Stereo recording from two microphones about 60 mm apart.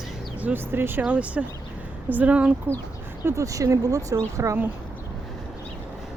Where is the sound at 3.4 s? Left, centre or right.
Right.